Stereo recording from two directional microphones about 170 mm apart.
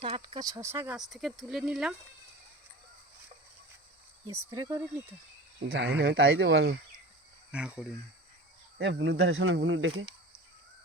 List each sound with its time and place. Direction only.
0.0 s speech: 30° right (ahead or behind); by 0.9 s 15° right (ahead or behind)
0.9 s speech: centre (ahead or behind)
4.3 s speech: 15° right (ahead or behind)
5.6 s speech: 85° right
7.5 s speech: 5° right (ahead or behind)
8.8 s speech: 90° right